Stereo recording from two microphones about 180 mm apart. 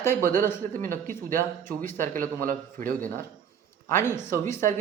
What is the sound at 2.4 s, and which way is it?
Speech, 50° right (ahead or behind).